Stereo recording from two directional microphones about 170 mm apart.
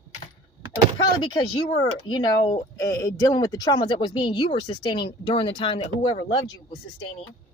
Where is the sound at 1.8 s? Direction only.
25° left (ahead or behind).